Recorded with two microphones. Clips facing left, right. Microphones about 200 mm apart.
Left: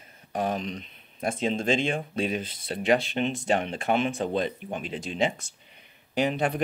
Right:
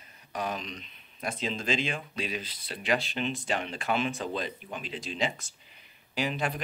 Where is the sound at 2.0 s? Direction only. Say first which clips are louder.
Left 7 dB; 50° left (ahead or behind).